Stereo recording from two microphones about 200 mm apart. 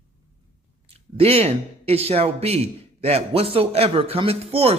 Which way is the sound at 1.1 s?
30° right (ahead or behind).